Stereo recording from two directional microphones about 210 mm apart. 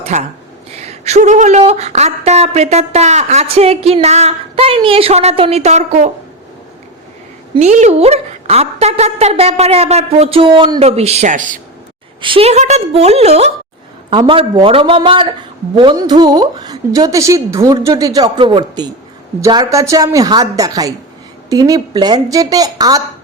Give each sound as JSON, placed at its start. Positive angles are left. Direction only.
{"t": 0.0, "sound": "a woman's voice", "side_deg": -35}
{"t": 7.5, "sound": "a woman's voice", "side_deg": -35}
{"t": 12.2, "sound": "a woman's voice", "side_deg": -25}